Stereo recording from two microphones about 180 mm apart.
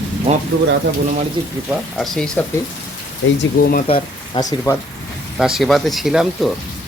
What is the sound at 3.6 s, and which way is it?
Speech, 55° left (ahead or behind).